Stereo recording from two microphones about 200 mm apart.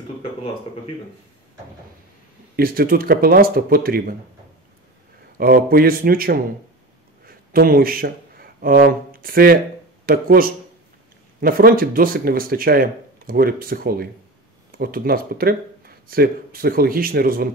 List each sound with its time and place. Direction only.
2.5 s speech: 50° right (ahead or behind)
5.4 s speech: 50° right (ahead or behind)